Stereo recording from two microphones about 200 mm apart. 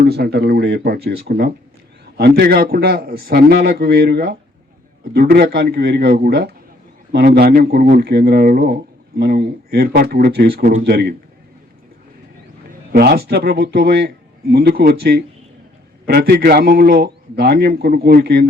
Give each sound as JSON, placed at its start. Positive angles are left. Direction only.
{"t": 0.0, "sound": "speech", "side_deg": -50}
{"t": 12.9, "sound": "speech", "side_deg": -55}